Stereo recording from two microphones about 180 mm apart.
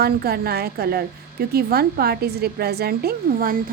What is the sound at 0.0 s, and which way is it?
A woman's voice, 60° right (ahead or behind).